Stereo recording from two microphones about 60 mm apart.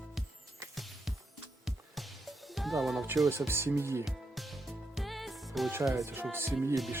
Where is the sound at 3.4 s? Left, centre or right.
Right.